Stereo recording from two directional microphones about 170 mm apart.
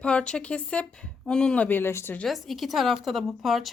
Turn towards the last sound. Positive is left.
turn(degrees=0)  # may be behind; listen again after turning